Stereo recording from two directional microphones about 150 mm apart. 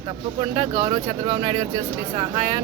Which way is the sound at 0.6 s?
35° right (ahead or behind).